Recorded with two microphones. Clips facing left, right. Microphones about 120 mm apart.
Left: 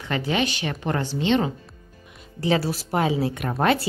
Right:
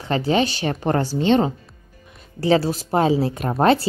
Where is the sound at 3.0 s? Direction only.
35° right (ahead or behind).